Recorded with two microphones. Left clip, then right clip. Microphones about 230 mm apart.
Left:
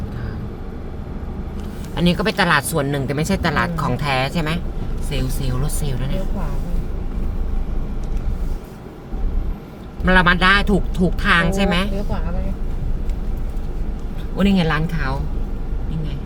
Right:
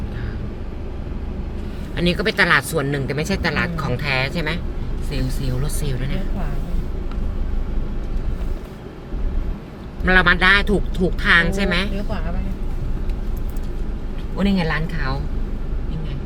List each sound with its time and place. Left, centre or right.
2.0 s speech: centre
5.6 s speech: centre
10.1 s speech: centre
14.4 s speech: centre